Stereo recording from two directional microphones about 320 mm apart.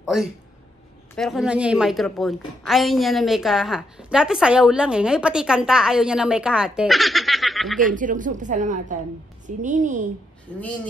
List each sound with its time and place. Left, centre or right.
0.0 s a woman's voice: centre
7.8 s speech: right
10.5 s a woman's voice: centre